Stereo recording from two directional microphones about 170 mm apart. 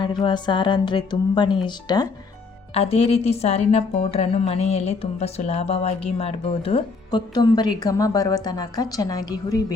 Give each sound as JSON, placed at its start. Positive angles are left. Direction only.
{"t": 0.0, "sound": "speech", "side_deg": 30}
{"t": 2.7, "sound": "a woman's voice", "side_deg": 35}